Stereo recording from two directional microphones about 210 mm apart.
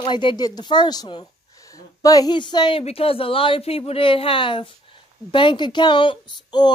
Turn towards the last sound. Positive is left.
turn(degrees=20)  # may be behind; listen again after turning